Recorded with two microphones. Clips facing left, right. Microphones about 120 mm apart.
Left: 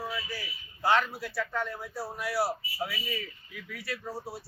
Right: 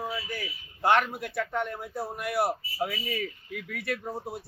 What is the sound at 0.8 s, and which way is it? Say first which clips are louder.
A man's voice: right 2 dB; 60° right (ahead or behind).